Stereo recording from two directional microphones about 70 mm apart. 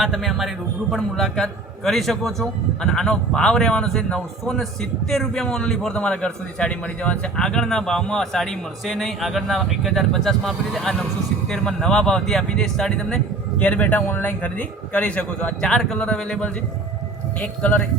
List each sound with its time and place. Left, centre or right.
0.0 s a man's voice: centre
13.6 s a man's voice: left